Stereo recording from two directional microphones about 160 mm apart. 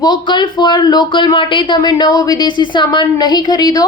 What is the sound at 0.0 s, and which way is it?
Speech, 25° left (ahead or behind).